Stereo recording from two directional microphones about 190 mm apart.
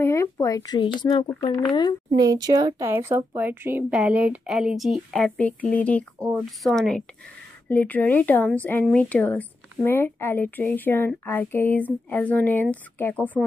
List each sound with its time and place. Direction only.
0.0 s speech: 15° left (ahead or behind)
2.1 s speech: 20° right (ahead or behind); by 13.4 s 10° left (ahead or behind)